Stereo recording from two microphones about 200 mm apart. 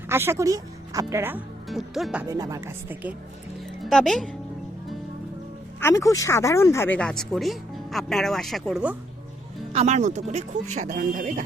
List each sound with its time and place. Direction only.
0.1 s speech: 10° right (ahead or behind)
1.6 s speech: centre (ahead or behind)
2.2 s speech: 15° right (ahead or behind)
3.8 s speech: centre (ahead or behind)
5.8 s speech: 15° left (ahead or behind); by 9.0 s 5° right (ahead or behind)
9.7 s speech: 35° right (ahead or behind)